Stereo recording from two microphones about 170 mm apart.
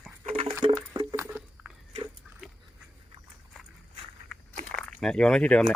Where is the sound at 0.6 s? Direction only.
20° right (ahead or behind).